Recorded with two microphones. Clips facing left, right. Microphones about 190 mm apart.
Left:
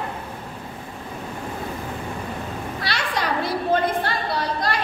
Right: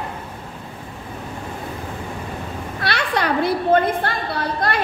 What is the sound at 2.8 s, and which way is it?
A woman's voice, 60° right (ahead or behind).